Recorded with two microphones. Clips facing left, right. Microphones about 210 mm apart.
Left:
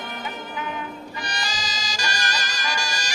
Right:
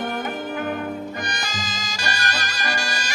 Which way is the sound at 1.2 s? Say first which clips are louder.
Right 2 dB; 55° right (ahead or behind).